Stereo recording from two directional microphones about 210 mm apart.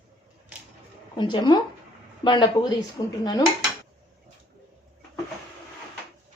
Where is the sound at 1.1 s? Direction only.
20° left (ahead or behind).